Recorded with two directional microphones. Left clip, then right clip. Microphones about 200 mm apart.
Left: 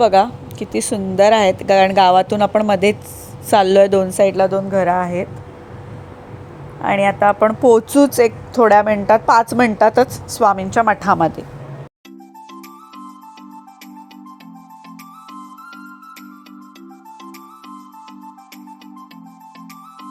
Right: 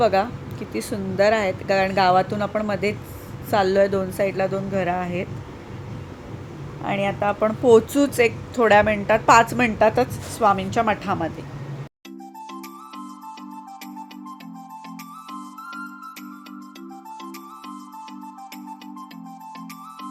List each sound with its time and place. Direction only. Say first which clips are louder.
0.0 s speech: left 7 dB; 30° left (ahead or behind)
6.8 s a woman's voice: left 9 dB; 25° left (ahead or behind)
15.3 s music: even; centre (ahead or behind)